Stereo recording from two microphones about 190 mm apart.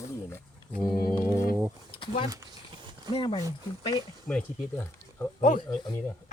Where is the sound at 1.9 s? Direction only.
25° left (ahead or behind).